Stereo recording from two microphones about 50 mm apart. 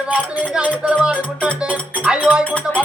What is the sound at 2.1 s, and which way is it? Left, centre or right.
Music, centre.